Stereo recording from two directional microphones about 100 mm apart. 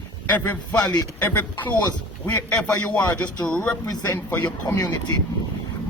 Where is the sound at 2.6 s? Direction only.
15° left (ahead or behind).